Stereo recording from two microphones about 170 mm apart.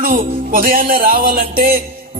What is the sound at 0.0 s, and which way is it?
Speech, 55° right (ahead or behind).